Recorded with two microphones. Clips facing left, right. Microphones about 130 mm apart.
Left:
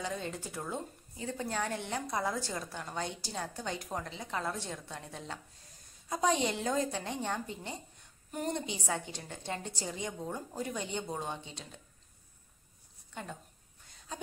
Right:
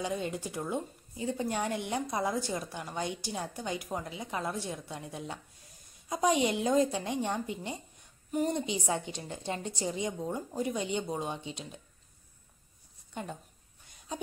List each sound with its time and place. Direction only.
0.0 s a woman's voice: 15° right (ahead or behind)
13.1 s speech: 20° right (ahead or behind)